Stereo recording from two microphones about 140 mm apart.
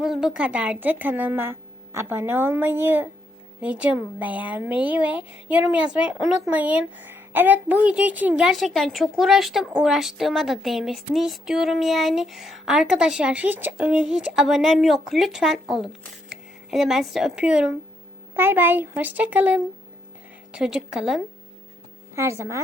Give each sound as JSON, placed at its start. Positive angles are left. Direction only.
{"t": 0.0, "sound": "a woman's voice", "side_deg": -5}
{"t": 18.3, "sound": "a woman's voice", "side_deg": -15}
{"t": 22.1, "sound": "speech", "side_deg": -20}